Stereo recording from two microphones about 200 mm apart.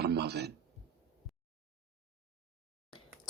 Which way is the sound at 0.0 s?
55° right (ahead or behind).